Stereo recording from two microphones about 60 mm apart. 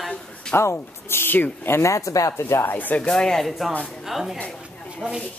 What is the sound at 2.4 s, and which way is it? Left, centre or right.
Speech, left.